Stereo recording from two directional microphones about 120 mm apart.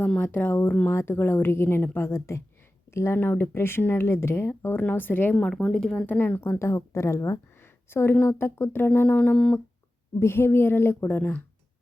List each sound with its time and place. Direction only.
0.0 s speech: 15° left (ahead or behind)
6.1 s speech: 15° left (ahead or behind)
10.2 s speech: 20° left (ahead or behind)